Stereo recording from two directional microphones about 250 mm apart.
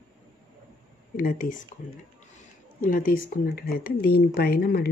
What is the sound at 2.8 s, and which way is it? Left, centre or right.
Speech, left.